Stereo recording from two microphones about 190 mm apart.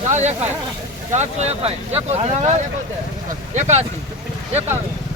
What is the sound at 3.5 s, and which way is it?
Speech, 35° right (ahead or behind).